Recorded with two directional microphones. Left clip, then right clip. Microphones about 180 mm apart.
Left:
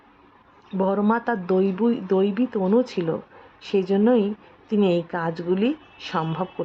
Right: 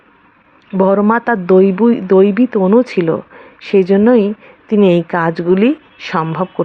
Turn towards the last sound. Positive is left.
turn(degrees=-25)  # may be behind; listen again after turning